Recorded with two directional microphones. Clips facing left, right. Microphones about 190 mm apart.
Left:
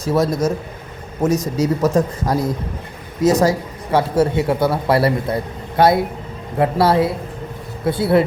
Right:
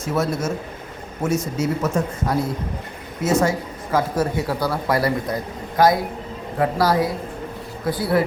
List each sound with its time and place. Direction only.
0.0 s a man's voice: 35° left (ahead or behind)